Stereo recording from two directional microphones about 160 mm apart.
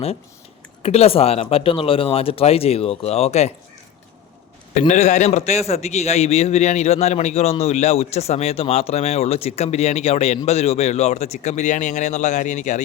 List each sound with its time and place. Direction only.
0.8 s speech: 40° left (ahead or behind)
4.7 s a man's voice: 50° left (ahead or behind)